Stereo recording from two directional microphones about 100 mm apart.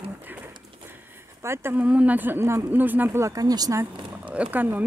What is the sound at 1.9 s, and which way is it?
Speech, 15° right (ahead or behind).